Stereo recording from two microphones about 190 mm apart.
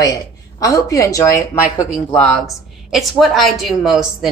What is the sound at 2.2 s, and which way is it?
A woman's voice, centre (ahead or behind).